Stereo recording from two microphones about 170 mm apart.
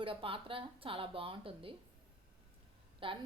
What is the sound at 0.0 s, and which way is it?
A woman's voice, 30° right (ahead or behind).